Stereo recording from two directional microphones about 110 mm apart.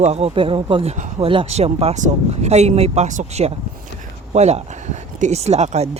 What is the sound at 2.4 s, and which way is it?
Speech, 90° right.